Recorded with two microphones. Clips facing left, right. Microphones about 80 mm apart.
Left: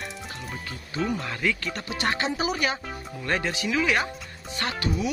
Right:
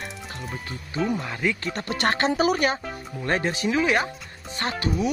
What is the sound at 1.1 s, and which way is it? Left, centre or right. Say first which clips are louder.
Speech: right 1 dB; right.